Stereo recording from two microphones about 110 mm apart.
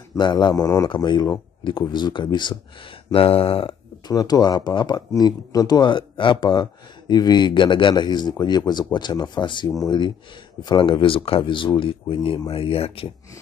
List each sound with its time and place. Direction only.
0.2 s speech: 45° left (ahead or behind)
0.6 s speech: 30° left (ahead or behind)
0.8 s speech: 45° left (ahead or behind)
3.1 s speech: 60° left (ahead or behind)
4.1 s speech: 35° left (ahead or behind); by 13.1 s 60° left (ahead or behind)